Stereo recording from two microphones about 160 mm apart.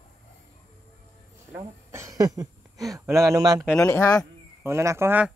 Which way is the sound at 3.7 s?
15° left (ahead or behind).